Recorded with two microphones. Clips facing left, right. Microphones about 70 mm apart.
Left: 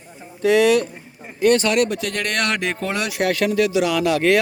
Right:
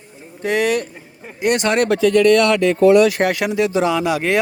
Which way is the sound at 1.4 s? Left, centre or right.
Centre.